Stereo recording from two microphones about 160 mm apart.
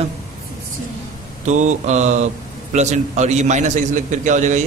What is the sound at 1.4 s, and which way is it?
A man's voice, 50° right (ahead or behind).